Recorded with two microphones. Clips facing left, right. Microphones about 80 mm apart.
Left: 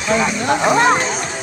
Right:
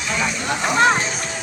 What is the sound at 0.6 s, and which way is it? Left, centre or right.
Music, left.